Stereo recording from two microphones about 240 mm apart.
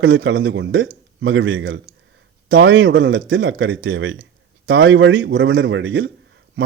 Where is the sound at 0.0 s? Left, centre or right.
Right.